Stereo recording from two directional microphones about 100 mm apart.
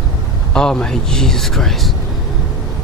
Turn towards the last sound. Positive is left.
turn(degrees=0)  # may be behind; listen again after turning